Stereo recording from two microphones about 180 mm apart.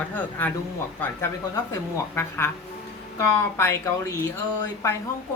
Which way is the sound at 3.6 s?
15° left (ahead or behind).